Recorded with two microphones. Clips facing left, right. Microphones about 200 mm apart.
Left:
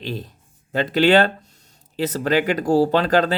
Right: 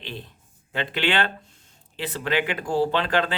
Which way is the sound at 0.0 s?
40° left (ahead or behind).